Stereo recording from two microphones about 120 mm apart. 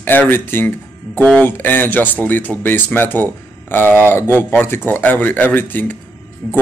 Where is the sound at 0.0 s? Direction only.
15° left (ahead or behind).